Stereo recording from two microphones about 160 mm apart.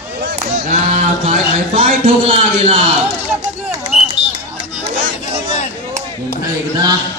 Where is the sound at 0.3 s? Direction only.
60° right (ahead or behind).